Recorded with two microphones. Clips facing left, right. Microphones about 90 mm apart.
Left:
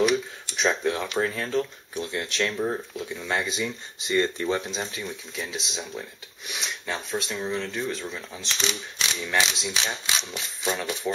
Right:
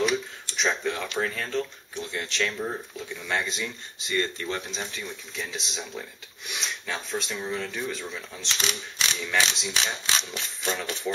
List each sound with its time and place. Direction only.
0.6 s speech: 5° left (ahead or behind)
4.1 s speech: 20° left (ahead or behind)